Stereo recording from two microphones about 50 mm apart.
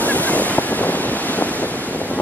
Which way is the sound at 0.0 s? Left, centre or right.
Left.